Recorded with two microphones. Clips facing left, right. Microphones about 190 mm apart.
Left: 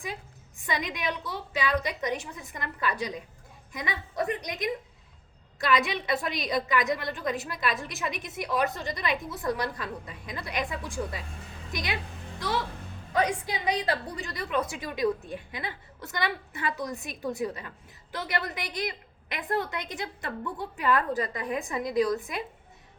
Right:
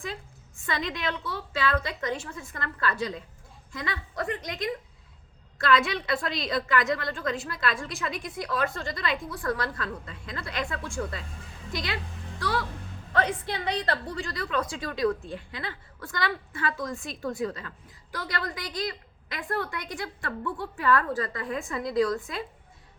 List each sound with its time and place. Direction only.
0.6 s a woman's voice: 15° left (ahead or behind)
13.1 s a woman's voice: 15° left (ahead or behind)